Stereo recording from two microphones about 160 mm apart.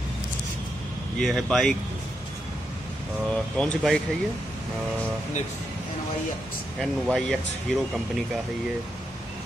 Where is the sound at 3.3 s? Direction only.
5° left (ahead or behind).